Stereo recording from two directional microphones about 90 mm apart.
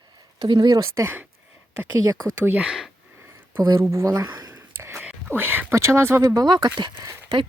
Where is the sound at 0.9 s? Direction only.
30° right (ahead or behind).